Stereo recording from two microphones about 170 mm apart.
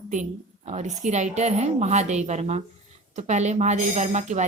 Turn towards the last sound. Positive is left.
turn(degrees=-45)  # may be behind; listen again after turning